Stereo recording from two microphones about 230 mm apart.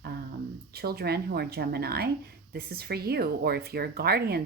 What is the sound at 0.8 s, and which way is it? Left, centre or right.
Speech, right.